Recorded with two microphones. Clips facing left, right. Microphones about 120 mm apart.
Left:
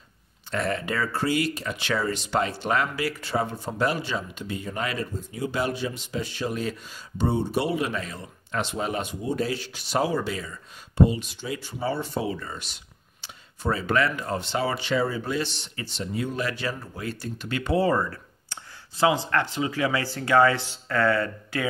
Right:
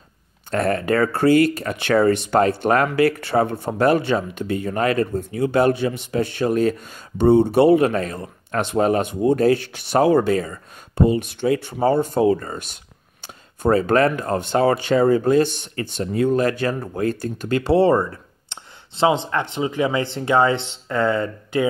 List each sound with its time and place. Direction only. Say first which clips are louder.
0.5 s speech: right 8 dB; 50° right (ahead or behind); by 21.6 s 20° right (ahead or behind)